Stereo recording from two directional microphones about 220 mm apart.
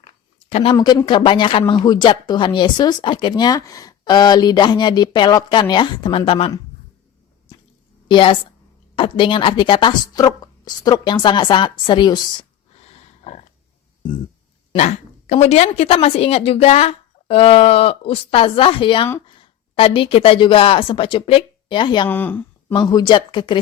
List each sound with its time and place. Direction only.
0.5 s speech: 25° left (ahead or behind)
8.0 s a woman's voice: 25° left (ahead or behind)
14.7 s a woman's voice: 30° left (ahead or behind)
22.1 s speech: 10° left (ahead or behind)